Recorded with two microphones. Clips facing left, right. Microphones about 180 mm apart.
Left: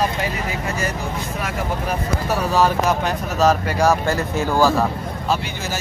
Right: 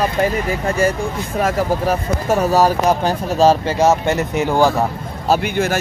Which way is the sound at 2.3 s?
40° right (ahead or behind).